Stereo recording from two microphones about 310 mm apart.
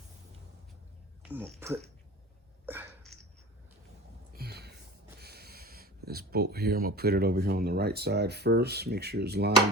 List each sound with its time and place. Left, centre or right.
1.2 s speech: centre
2.6 s sneeze: centre
4.4 s a sound: right
5.2 s speech: right